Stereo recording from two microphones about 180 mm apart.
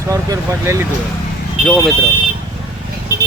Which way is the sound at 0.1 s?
15° right (ahead or behind).